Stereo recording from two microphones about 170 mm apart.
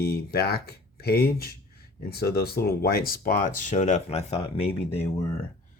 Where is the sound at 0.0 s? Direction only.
70° left (ahead or behind); by 4.7 s 35° left (ahead or behind).